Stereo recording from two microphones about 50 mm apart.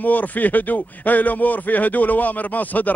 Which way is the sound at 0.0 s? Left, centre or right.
Left.